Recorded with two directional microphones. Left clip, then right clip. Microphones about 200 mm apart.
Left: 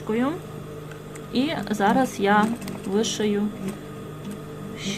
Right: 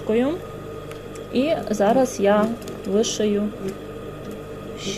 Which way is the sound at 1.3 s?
10° right (ahead or behind).